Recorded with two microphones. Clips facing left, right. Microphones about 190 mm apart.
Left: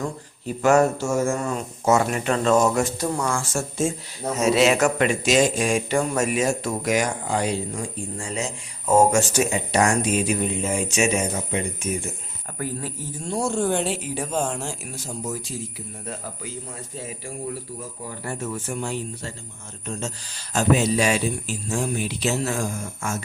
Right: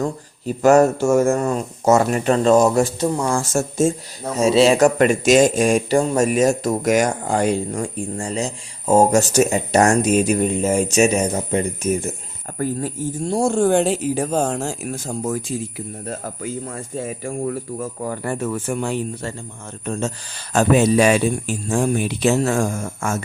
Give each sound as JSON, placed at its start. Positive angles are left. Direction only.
{"t": 0.0, "sound": "speech", "side_deg": -40}
{"t": 1.0, "sound": "speech", "side_deg": -55}
{"t": 3.1, "sound": "speech", "side_deg": -20}
{"t": 3.3, "sound": "speech", "side_deg": -45}
{"t": 4.4, "sound": "speech", "side_deg": -30}